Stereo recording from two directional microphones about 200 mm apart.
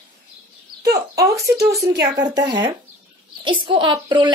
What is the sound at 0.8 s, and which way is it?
A woman's voice, 15° right (ahead or behind).